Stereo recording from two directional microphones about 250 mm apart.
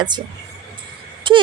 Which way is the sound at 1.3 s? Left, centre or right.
Centre.